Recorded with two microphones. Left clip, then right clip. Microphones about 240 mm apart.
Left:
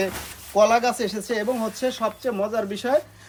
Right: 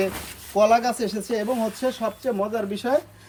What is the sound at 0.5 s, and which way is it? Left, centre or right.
Speech, centre.